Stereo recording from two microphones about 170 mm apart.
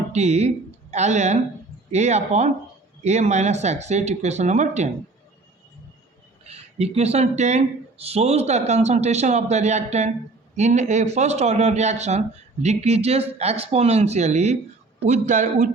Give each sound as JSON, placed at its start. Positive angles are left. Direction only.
{"t": 0.1, "sound": "a woman's voice", "side_deg": -40}
{"t": 6.5, "sound": "a man's voice", "side_deg": -40}